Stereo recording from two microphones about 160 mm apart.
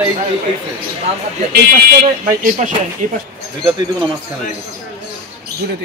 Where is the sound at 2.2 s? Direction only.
55° right (ahead or behind).